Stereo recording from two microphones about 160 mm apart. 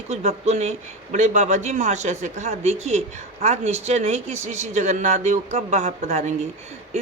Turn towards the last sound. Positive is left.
turn(degrees=-45)  # may be behind; listen again after turning